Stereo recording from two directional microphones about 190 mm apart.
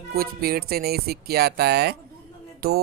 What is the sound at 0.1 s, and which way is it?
Speech, 50° right (ahead or behind).